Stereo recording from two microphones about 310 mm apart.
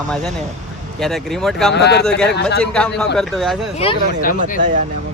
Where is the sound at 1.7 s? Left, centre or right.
Left.